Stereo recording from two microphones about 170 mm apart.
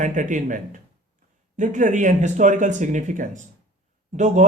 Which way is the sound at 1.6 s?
50° right (ahead or behind).